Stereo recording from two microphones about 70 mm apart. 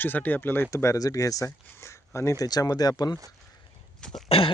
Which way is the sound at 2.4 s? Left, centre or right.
Left.